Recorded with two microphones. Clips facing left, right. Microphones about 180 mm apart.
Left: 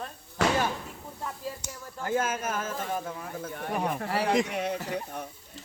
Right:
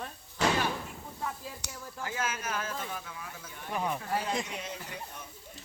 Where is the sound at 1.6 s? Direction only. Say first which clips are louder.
Left 4 dB; 70° right (ahead or behind).